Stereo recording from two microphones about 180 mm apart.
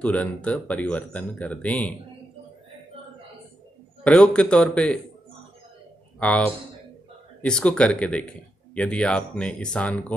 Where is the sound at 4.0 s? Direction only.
5° left (ahead or behind).